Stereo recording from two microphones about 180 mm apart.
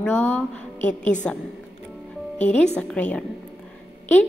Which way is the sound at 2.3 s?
40° left (ahead or behind).